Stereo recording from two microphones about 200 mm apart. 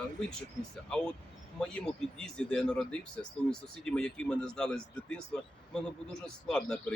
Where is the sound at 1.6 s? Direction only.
5° left (ahead or behind).